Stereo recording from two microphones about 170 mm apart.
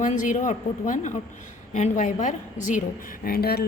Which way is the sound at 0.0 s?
50° left (ahead or behind).